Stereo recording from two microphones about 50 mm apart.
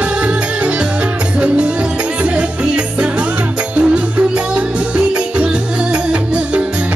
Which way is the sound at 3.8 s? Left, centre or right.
Right.